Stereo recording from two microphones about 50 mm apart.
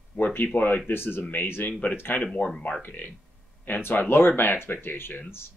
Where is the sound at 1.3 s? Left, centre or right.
Left.